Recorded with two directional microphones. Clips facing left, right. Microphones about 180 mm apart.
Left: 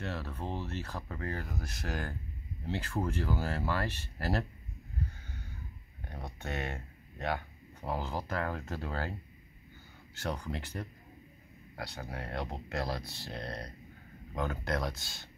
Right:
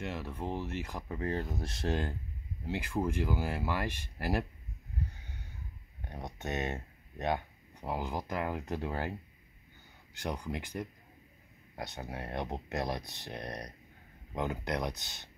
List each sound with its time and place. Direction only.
0.0 s speech: 15° right (ahead or behind)
2.6 s speech: 10° right (ahead or behind)
5.1 s a sound: 20° right (ahead or behind)
6.0 s speech: 20° right (ahead or behind)
10.1 s speech: 15° right (ahead or behind)